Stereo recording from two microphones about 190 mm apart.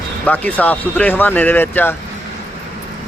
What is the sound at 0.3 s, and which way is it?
Speech, 10° left (ahead or behind).